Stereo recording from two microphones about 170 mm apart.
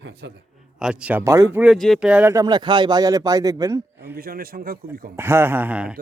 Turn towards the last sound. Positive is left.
turn(degrees=-5)  # may be behind; listen again after turning